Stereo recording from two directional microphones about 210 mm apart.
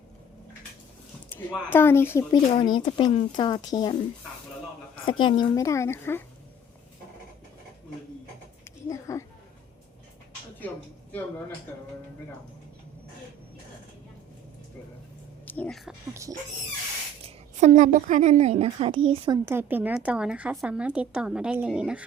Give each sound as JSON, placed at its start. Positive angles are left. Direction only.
{"t": 1.4, "sound": "speech", "side_deg": 10}
{"t": 5.0, "sound": "a woman's voice", "side_deg": 20}
{"t": 8.6, "sound": "a sound", "side_deg": 15}
{"t": 10.6, "sound": "a woman's voice", "side_deg": 10}
{"t": 15.4, "sound": "speech", "side_deg": 5}
{"t": 17.2, "sound": "a woman's voice", "side_deg": -35}
{"t": 19.5, "sound": "a woman's voice", "side_deg": -10}